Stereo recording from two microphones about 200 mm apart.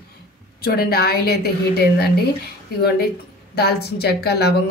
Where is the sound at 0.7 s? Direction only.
50° left (ahead or behind).